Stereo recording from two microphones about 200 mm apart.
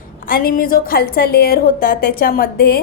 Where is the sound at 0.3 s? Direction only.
45° left (ahead or behind).